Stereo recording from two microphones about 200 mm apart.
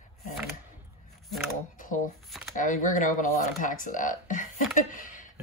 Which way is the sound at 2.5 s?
40° left (ahead or behind).